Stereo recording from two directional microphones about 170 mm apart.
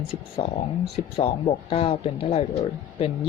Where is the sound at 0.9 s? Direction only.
35° left (ahead or behind).